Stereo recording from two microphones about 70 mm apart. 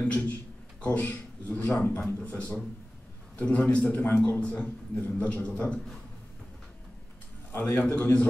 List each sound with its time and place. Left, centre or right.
0.0 s a sound: left
0.8 s a man's voice: left
3.3 s a man's voice: left
7.5 s a man's voice: left